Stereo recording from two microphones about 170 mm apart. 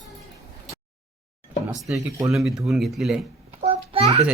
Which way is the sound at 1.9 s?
10° right (ahead or behind).